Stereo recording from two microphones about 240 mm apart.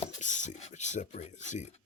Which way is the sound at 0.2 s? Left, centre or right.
Left.